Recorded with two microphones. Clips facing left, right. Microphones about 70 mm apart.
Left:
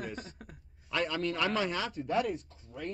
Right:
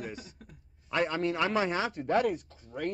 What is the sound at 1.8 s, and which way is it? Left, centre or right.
Speech, right.